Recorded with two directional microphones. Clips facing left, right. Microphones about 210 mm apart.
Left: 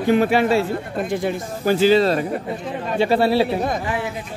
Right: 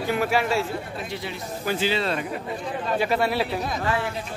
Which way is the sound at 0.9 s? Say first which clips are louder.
Left 10 dB; 50° left (ahead or behind).